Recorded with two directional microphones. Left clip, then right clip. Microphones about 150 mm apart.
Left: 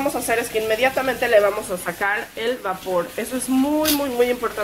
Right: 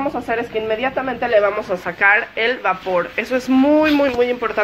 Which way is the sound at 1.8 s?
Centre (ahead or behind).